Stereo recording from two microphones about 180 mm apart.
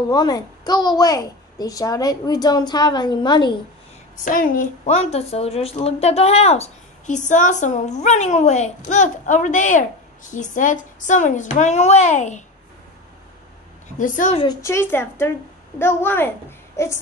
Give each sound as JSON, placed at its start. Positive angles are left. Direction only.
{"t": 0.1, "sound": "a woman's voice", "side_deg": 20}
{"t": 4.2, "sound": "a woman's voice", "side_deg": 50}
{"t": 13.9, "sound": "a woman's voice", "side_deg": 45}
{"t": 14.6, "sound": "a child's voice", "side_deg": 15}